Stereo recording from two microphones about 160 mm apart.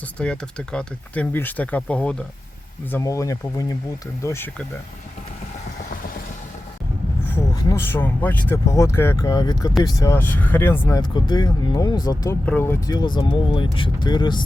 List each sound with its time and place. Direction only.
0.2 s speech: 5° left (ahead or behind)
2.9 s speech: 20° left (ahead or behind)
7.3 s speech: 15° left (ahead or behind)
12.5 s speech: 15° left (ahead or behind)
13.0 s speech: 30° left (ahead or behind)